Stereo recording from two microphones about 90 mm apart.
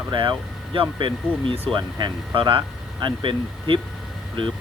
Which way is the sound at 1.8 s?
50° right (ahead or behind).